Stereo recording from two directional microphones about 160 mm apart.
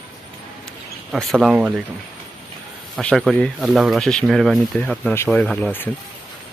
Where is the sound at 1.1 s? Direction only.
Centre (ahead or behind).